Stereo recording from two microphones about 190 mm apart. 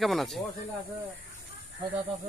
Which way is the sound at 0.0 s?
Centre (ahead or behind).